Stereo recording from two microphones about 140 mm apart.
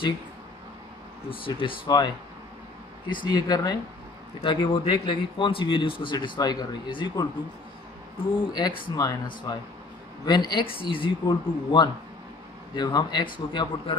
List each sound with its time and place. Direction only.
1.3 s a man's voice: 40° left (ahead or behind)
8.5 s a man's voice: 30° left (ahead or behind)